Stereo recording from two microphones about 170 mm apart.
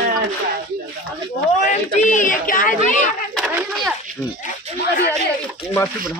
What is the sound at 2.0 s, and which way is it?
Speech, 50° left (ahead or behind).